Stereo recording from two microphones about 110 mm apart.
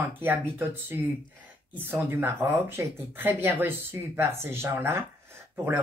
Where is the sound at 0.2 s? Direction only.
20° right (ahead or behind).